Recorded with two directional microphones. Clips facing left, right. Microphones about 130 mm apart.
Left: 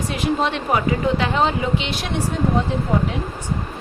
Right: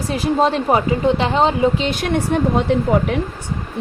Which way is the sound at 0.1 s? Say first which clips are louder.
Right 6 dB; 35° right (ahead or behind).